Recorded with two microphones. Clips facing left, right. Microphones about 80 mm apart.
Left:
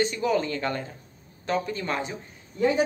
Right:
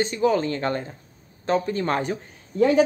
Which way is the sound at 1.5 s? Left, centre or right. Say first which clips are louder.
Right 5 dB; right.